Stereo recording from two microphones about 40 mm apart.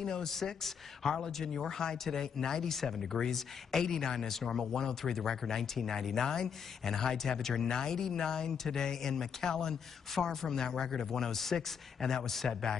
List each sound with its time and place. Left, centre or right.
0.0 s speech: centre